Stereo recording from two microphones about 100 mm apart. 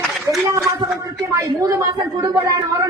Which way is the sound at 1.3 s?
30° right (ahead or behind).